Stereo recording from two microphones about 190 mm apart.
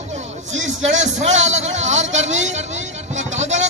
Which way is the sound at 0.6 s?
40° right (ahead or behind).